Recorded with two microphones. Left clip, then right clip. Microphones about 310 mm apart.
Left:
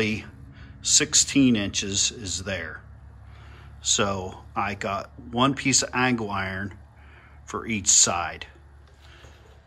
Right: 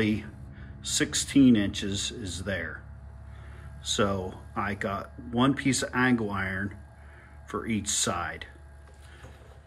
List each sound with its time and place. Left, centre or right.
0.0 s gasp: centre
0.8 s speech: centre
3.8 s speech: centre